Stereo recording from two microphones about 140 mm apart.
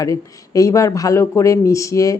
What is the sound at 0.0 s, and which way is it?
Speech, 25° left (ahead or behind).